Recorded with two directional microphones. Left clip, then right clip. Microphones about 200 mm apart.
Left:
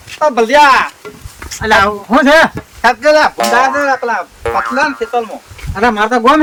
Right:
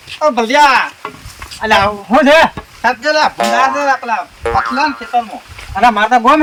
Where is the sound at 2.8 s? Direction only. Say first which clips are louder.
Left 4 dB; 25° left (ahead or behind).